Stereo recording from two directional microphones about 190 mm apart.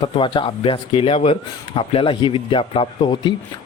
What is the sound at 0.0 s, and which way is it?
A man's voice, 25° left (ahead or behind).